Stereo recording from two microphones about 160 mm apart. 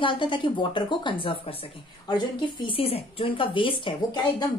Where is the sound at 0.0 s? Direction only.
30° left (ahead or behind).